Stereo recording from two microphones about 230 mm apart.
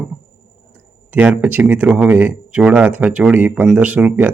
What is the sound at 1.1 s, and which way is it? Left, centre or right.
Speech, centre.